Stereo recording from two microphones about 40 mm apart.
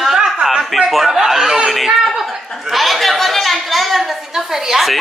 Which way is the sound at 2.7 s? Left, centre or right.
Centre.